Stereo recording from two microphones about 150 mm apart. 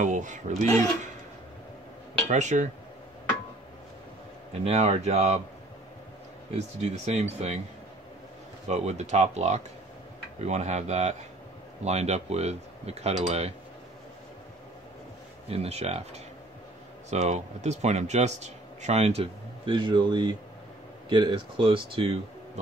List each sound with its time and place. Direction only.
0.0 s speech: 55° right (ahead or behind)
2.2 s speech: 55° right (ahead or behind)
4.6 s speech: 45° right (ahead or behind)
6.8 s speech: 45° right (ahead or behind)
8.6 s speech: 45° right (ahead or behind)
15.4 s speech: 45° right (ahead or behind)